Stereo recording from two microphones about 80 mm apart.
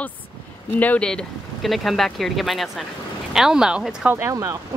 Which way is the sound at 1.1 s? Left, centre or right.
Centre.